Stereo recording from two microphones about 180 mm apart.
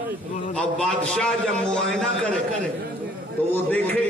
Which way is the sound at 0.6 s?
5° left (ahead or behind).